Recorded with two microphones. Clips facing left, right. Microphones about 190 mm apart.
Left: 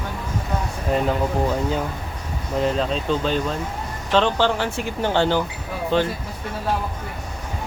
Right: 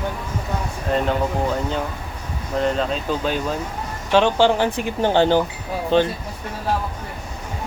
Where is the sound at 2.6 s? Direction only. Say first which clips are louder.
Even; centre (ahead or behind).